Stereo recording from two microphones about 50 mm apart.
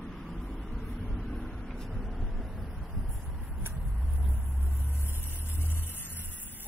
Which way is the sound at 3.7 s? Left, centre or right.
Centre.